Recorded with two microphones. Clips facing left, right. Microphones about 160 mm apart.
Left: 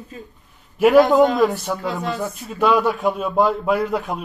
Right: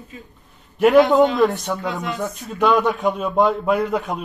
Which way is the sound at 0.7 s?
Centre (ahead or behind).